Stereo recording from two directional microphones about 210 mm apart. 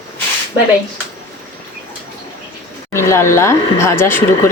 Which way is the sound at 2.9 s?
15° left (ahead or behind).